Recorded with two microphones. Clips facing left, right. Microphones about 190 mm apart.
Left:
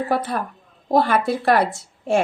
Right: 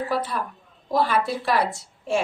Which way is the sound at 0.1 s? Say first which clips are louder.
Left 4 dB; 55° left (ahead or behind).